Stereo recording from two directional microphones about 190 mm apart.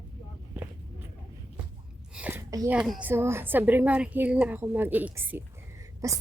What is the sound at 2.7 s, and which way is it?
A woman's voice, 5° right (ahead or behind).